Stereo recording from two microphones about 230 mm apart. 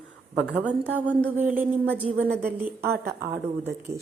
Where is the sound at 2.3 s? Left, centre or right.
Right.